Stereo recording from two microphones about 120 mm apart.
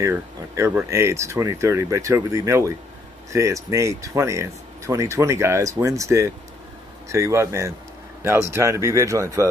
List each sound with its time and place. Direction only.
0.0 s speech: 20° right (ahead or behind)